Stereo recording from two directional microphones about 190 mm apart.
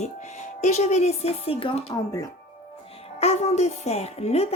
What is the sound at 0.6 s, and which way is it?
Speech, 35° left (ahead or behind).